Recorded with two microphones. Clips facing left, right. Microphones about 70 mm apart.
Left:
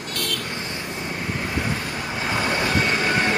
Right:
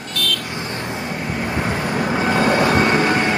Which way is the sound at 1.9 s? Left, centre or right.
Right.